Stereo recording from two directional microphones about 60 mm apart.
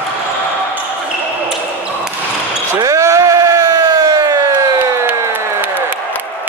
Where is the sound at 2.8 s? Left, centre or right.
Right.